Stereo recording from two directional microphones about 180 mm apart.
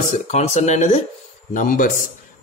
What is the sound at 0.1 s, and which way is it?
A man's voice, 40° left (ahead or behind).